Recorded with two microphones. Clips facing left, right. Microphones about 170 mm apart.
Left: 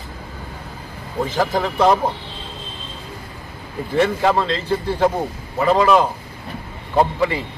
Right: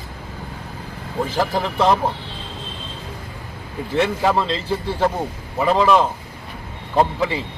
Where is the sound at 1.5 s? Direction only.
5° right (ahead or behind).